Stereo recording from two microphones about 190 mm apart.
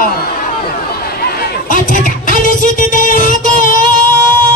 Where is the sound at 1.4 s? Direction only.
45° left (ahead or behind).